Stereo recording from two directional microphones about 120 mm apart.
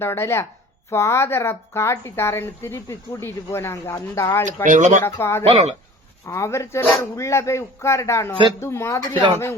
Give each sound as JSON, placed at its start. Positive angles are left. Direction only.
{"t": 0.0, "sound": "a woman's voice", "side_deg": 20}
{"t": 4.6, "sound": "speech", "side_deg": -90}
{"t": 5.1, "sound": "a woman's voice", "side_deg": 20}